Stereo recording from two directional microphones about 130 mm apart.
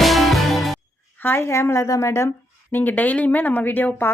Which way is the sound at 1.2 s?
15° left (ahead or behind).